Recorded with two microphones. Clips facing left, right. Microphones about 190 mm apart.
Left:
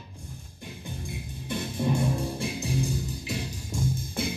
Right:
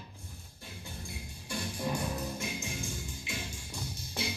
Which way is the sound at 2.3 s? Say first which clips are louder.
Left 8 dB; 35° left (ahead or behind).